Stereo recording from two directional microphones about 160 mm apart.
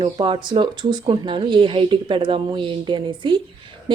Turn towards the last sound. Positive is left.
turn(degrees=-30)  # may be behind; listen again after turning